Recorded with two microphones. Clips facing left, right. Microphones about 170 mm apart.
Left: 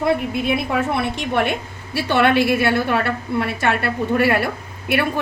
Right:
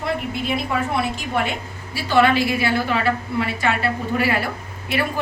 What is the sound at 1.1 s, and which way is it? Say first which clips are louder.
A woman's voice: left 3 dB; 65° left (ahead or behind).